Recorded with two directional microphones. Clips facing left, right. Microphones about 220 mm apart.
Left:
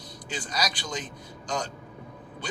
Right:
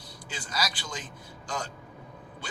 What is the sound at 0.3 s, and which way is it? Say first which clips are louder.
Speech: left 3 dB; 20° left (ahead or behind).